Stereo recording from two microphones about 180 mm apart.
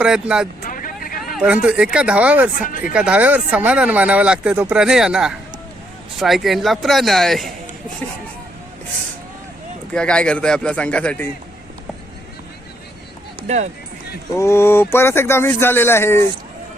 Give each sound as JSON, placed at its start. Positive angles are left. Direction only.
{"t": 0.0, "sound": "speech", "side_deg": -5}
{"t": 0.6, "sound": "vehicle", "side_deg": 50}
{"t": 1.6, "sound": "speech", "side_deg": -5}
{"t": 2.6, "sound": "speech", "side_deg": 50}
{"t": 2.9, "sound": "speech", "side_deg": -5}
{"t": 9.9, "sound": "speech", "side_deg": 5}
{"t": 14.3, "sound": "speech", "side_deg": 15}